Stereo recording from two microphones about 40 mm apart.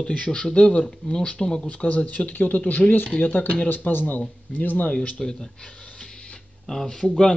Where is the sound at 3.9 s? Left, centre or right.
Left.